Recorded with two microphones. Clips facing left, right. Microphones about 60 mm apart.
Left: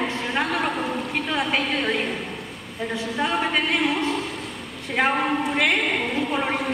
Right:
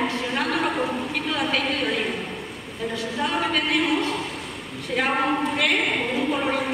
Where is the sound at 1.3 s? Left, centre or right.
Centre.